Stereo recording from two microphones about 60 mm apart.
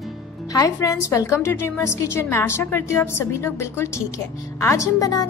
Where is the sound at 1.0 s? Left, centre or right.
Left.